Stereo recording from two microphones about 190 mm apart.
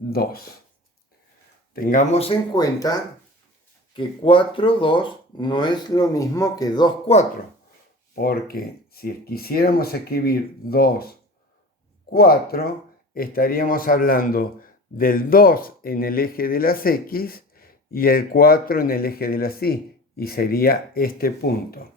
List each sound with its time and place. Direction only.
0.1 s a man's voice: 50° left (ahead or behind)
1.7 s a man's voice: 45° left (ahead or behind)
2.2 s speech: 20° left (ahead or behind)
8.1 s a man's voice: 50° left (ahead or behind)
12.1 s a man's voice: 55° left (ahead or behind)